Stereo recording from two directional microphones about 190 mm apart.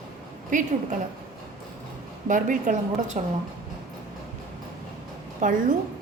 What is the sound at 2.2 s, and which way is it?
A woman's voice, 45° right (ahead or behind).